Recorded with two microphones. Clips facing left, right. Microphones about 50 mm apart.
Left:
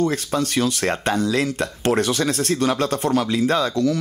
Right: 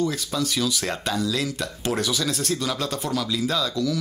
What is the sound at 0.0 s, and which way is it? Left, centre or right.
Speech, left.